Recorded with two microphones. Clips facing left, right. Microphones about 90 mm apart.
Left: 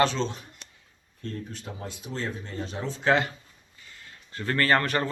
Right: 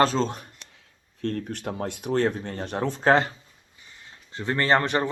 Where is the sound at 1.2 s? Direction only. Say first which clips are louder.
Right 8 dB; 65° right (ahead or behind).